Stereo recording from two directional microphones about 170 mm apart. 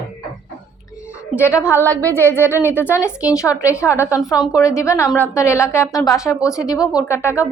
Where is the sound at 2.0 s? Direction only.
10° left (ahead or behind).